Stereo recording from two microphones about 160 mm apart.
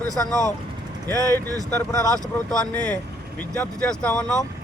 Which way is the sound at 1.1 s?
20° right (ahead or behind).